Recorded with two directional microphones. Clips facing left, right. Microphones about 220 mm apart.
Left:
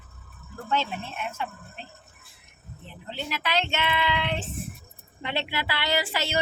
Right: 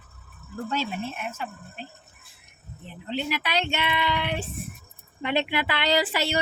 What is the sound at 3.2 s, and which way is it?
Speech, 15° right (ahead or behind).